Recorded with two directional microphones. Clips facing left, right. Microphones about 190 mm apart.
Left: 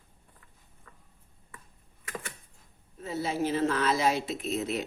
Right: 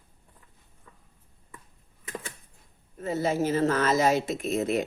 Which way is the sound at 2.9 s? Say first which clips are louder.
Right 4 dB; 50° right (ahead or behind).